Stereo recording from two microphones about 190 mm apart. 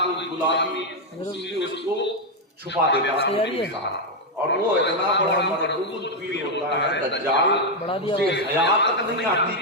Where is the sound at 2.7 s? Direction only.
65° left (ahead or behind).